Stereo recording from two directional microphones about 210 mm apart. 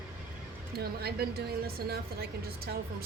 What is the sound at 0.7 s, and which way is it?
Music, 45° right (ahead or behind).